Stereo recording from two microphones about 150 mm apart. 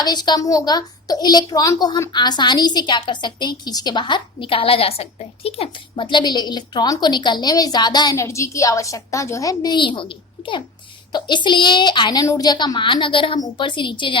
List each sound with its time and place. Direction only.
0.0 s a woman's voice: 30° left (ahead or behind)